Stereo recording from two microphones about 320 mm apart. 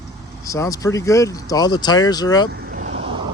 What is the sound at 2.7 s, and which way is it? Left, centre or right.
Vehicle, right.